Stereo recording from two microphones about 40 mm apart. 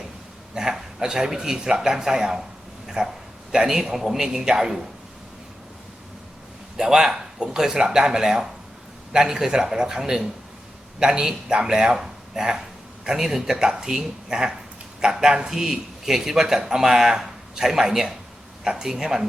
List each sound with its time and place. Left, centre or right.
0.5 s speech: centre
2.8 s a sound: centre
3.5 s speech: centre
6.7 s speech: centre